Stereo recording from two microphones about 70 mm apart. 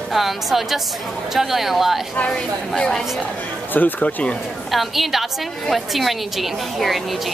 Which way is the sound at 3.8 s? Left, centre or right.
Left.